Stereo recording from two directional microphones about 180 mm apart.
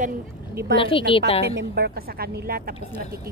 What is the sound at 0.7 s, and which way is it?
Speech, 30° left (ahead or behind).